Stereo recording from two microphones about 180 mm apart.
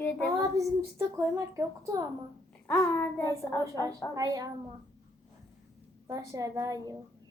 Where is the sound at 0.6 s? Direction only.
15° right (ahead or behind).